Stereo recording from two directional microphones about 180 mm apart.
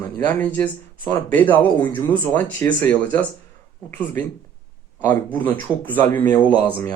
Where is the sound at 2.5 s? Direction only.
10° left (ahead or behind).